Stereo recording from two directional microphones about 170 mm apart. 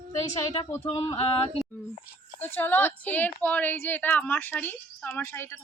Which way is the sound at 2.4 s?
10° left (ahead or behind).